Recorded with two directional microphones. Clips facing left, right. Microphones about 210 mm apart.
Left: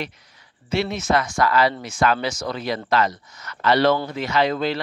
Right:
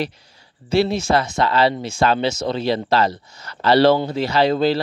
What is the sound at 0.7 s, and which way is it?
Speech, 30° right (ahead or behind).